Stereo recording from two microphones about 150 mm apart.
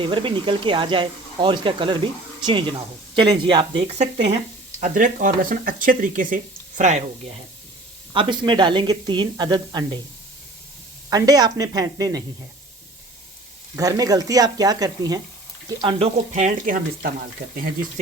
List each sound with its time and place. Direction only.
0.0 s speech: 35° right (ahead or behind)
3.8 s speech: 45° right (ahead or behind)
4.8 s speech: 60° right (ahead or behind)
8.1 s speech: 35° right (ahead or behind)
11.1 s speech: 25° right (ahead or behind)
13.7 s speech: 25° right (ahead or behind)
15.8 s speech: 40° right (ahead or behind); by 17.1 s 65° right (ahead or behind)